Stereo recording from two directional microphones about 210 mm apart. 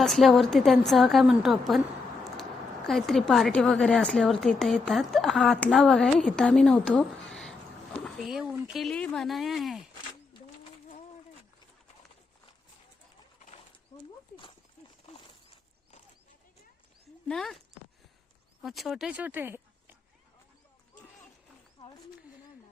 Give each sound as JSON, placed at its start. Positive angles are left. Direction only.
{"t": 0.0, "sound": "speech", "side_deg": 0}
{"t": 10.6, "sound": "bird", "side_deg": 35}
{"t": 15.0, "sound": "a sound", "side_deg": 30}
{"t": 17.2, "sound": "speech", "side_deg": 0}
{"t": 18.6, "sound": "speech", "side_deg": 0}